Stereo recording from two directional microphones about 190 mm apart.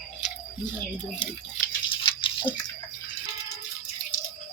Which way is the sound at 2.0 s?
25° left (ahead or behind).